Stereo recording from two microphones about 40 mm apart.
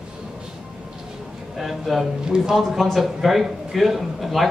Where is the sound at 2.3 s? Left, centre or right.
Centre.